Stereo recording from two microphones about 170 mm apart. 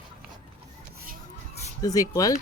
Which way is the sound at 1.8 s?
20° left (ahead or behind).